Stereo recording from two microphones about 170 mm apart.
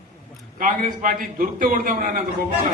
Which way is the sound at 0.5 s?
50° right (ahead or behind).